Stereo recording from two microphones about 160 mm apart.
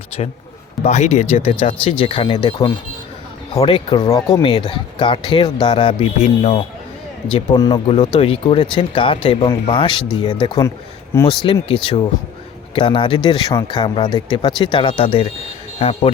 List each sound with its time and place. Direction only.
0.1 s speech: 40° left (ahead or behind); by 4.4 s 20° left (ahead or behind)
4.4 s speech: 35° left (ahead or behind)
7.6 s speech: 35° left (ahead or behind)